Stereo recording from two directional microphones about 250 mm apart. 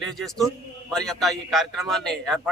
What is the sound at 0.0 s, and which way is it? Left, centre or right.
A man's voice, centre.